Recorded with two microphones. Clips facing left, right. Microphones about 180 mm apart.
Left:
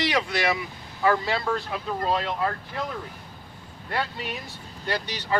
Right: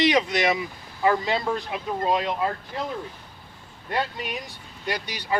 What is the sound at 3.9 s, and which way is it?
Speech, 15° right (ahead or behind).